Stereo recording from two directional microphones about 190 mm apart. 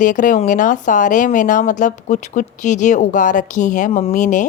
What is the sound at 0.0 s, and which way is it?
A woman's voice, 45° left (ahead or behind).